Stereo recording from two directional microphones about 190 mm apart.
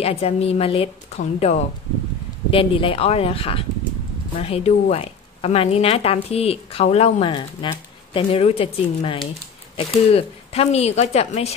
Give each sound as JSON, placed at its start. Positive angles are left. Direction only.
{"t": 0.0, "sound": "a woman's voice", "side_deg": 30}